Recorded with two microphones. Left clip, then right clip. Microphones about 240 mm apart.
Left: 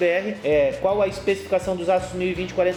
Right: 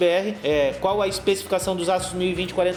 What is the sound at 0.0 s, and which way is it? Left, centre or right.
A man's voice, right.